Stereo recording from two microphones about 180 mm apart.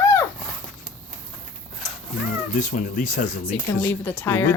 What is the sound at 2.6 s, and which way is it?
Speech, 45° left (ahead or behind).